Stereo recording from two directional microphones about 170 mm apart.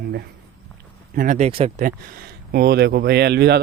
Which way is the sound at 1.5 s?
35° right (ahead or behind).